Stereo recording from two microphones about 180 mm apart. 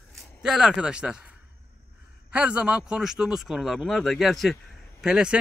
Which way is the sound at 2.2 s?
5° right (ahead or behind).